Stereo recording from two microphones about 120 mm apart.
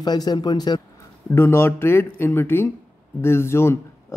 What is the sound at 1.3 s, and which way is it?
Speech, 20° left (ahead or behind).